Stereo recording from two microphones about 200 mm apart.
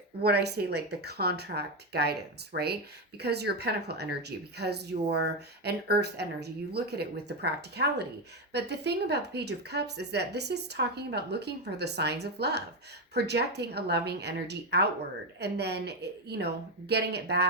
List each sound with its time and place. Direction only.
0.2 s speech: 55° right (ahead or behind)